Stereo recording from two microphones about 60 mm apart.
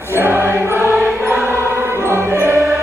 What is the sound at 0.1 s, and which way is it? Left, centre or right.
Choir, right.